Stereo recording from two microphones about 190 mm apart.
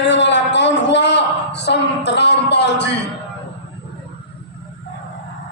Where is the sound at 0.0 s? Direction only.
70° left (ahead or behind).